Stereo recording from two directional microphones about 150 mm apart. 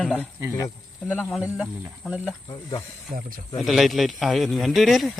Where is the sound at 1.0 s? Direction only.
5° left (ahead or behind).